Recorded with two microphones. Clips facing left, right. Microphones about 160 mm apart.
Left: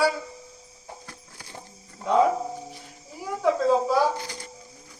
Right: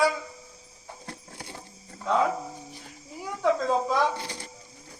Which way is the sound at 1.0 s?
25° right (ahead or behind).